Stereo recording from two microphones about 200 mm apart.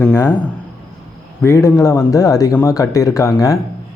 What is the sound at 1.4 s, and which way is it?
Speech, 15° left (ahead or behind).